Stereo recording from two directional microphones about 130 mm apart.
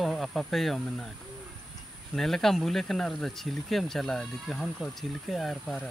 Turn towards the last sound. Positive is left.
turn(degrees=0)  # may be behind; listen again after turning